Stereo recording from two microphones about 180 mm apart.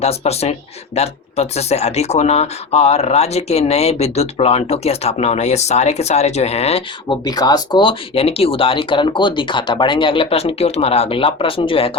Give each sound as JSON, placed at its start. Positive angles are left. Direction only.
{"t": 0.0, "sound": "speech", "side_deg": 35}